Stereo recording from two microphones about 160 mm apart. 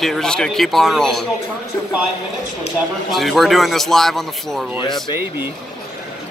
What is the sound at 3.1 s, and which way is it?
A man's voice, centre (ahead or behind).